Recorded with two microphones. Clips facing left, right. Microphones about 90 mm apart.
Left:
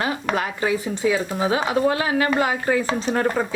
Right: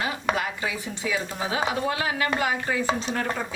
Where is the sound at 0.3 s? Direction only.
45° left (ahead or behind).